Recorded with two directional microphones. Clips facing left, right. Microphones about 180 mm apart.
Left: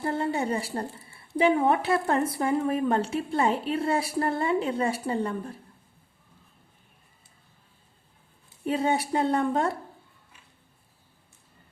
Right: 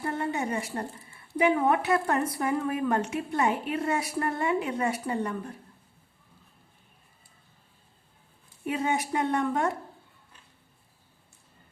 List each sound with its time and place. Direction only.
0.0 s a sound: 30° left (ahead or behind)
1.4 s speech: 30° left (ahead or behind)
8.6 s a woman's voice: 35° left (ahead or behind)